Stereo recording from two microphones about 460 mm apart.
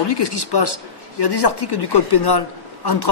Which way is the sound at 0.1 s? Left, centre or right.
Left.